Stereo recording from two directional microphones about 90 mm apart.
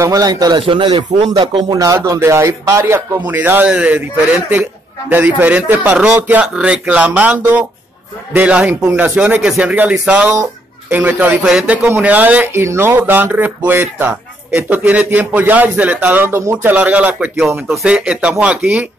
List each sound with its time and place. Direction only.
0.0 s speech: 40° right (ahead or behind)
0.6 s speech: 70° right (ahead or behind)
1.5 s speech: 45° right (ahead or behind)
2.0 s a man's voice: 30° right (ahead or behind); by 4.0 s 15° right (ahead or behind)
5.1 s a man's voice: 20° right (ahead or behind)
16.7 s speech: 15° right (ahead or behind)